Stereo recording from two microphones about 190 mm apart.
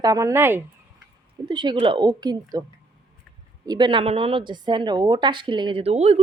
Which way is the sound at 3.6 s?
25° right (ahead or behind).